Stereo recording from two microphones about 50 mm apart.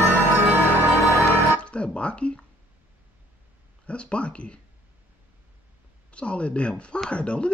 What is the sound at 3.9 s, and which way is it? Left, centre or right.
Speech, left.